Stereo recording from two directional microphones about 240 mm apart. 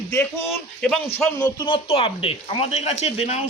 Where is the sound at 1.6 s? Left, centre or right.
Left.